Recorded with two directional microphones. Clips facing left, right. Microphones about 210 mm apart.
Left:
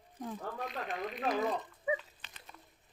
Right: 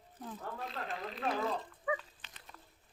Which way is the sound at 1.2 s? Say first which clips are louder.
Left 2 dB; 15° left (ahead or behind).